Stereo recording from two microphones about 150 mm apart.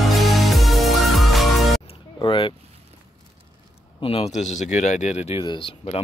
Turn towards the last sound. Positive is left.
turn(degrees=40)  # may be behind; listen again after turning